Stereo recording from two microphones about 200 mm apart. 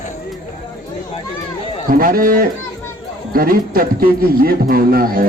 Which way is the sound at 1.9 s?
45° right (ahead or behind).